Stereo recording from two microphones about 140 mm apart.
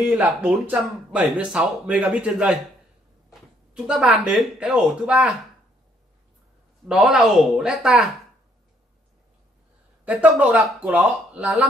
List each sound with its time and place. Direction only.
0.4 s speech: 10° right (ahead or behind)
6.9 s speech: 5° right (ahead or behind)
10.0 s speech: 10° right (ahead or behind)